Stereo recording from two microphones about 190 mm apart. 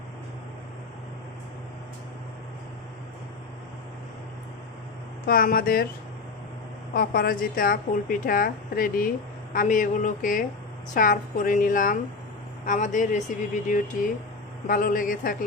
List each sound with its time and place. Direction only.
5.2 s speech: 50° left (ahead or behind)
6.9 s speech: 50° left (ahead or behind)